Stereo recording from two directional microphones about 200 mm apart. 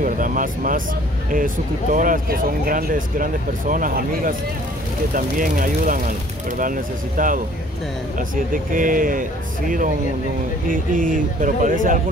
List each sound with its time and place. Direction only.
0.0 s speech: 40° right (ahead or behind)
8.7 s speech: 45° right (ahead or behind)